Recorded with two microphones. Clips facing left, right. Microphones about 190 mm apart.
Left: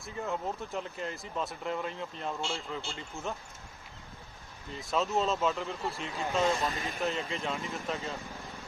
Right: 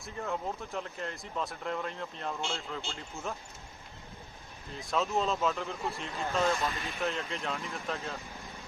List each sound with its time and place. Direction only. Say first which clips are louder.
0.0 s speech: left 1 dB; centre (ahead or behind)
4.8 s speech: left 1 dB; centre (ahead or behind)
6.4 s speech: left 1 dB; 15° left (ahead or behind)
6.7 s speech: left 2 dB; 45° left (ahead or behind)
7.0 s speech: left 1 dB; centre (ahead or behind)